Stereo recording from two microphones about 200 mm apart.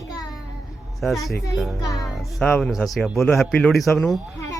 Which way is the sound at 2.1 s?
5° left (ahead or behind).